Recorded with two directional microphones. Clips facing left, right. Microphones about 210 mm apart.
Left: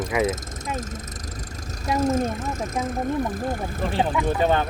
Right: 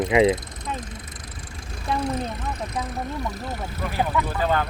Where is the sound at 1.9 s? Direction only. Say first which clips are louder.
Left 4 dB; 45° left (ahead or behind).